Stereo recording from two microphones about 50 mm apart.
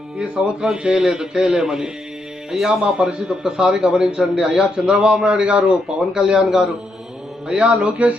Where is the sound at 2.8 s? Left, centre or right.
Right.